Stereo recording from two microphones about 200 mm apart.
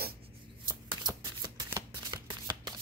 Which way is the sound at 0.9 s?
20° right (ahead or behind).